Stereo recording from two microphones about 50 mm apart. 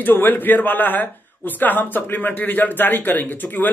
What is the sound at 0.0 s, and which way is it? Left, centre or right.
Speech, left.